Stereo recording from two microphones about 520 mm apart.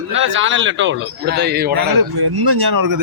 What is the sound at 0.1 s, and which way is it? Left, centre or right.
A man's voice, right.